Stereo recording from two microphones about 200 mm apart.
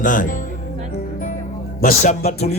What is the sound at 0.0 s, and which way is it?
Speech, 40° left (ahead or behind).